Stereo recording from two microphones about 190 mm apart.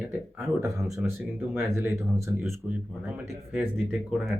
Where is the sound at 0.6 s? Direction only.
15° right (ahead or behind).